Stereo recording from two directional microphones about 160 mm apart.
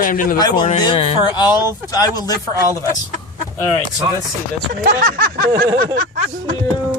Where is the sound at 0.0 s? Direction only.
60° left (ahead or behind).